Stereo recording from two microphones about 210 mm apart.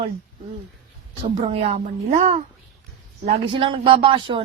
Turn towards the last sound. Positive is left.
turn(degrees=-25)  # may be behind; listen again after turning